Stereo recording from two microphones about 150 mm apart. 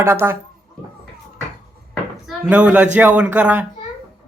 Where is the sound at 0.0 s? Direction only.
15° right (ahead or behind).